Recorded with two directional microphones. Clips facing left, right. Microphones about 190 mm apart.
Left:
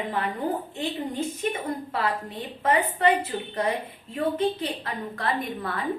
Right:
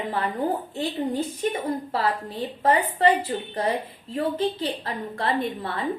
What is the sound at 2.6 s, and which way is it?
A woman's voice, 30° right (ahead or behind).